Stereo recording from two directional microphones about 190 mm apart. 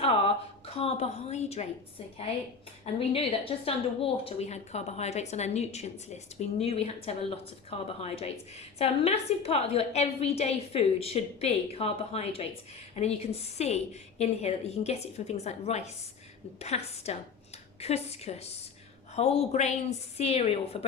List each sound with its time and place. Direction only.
0.0 s a woman's voice: 30° left (ahead or behind)
2.8 s a woman's voice: 30° left (ahead or behind)